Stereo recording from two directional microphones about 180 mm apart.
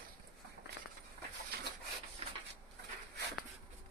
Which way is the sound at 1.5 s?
60° right (ahead or behind).